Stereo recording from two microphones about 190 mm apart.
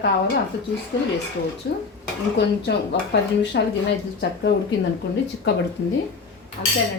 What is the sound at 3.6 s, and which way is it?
Speech, 70° left (ahead or behind).